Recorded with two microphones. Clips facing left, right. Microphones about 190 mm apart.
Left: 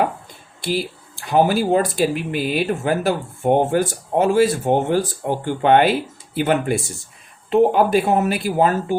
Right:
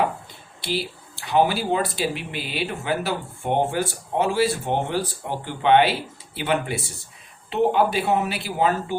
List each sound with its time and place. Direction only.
0.6 s speech: 50° left (ahead or behind)